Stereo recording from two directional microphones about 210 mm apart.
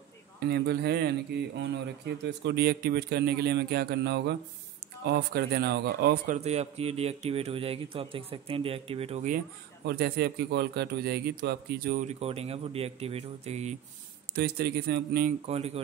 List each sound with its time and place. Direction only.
0.4 s a man's voice: 50° right (ahead or behind); by 9.4 s 35° right (ahead or behind)
9.8 s speech: 50° right (ahead or behind); by 13.7 s 30° right (ahead or behind)
14.3 s speech: 50° right (ahead or behind)
15.4 s a man's voice: 30° right (ahead or behind)